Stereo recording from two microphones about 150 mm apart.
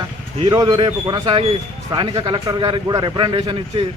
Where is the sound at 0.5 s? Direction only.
25° right (ahead or behind).